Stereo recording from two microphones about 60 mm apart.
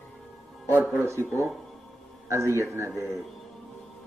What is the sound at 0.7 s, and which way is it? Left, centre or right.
Speech, right.